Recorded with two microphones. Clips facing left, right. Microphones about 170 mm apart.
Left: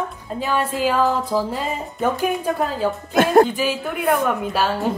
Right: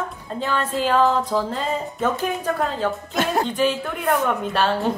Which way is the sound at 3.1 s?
50° left (ahead or behind).